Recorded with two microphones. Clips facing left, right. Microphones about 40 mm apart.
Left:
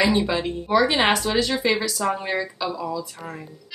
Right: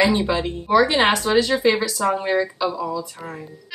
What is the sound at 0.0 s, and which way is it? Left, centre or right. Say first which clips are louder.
A woman's voice: right 2 dB; centre.